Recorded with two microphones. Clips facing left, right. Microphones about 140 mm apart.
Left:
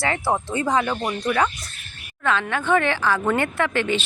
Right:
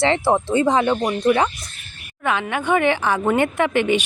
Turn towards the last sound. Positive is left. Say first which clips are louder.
# right 4 dB
turn(degrees=-15)  # may be behind; listen again after turning